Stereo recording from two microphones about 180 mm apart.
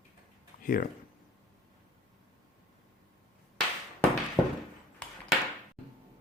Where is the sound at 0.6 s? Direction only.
50° left (ahead or behind).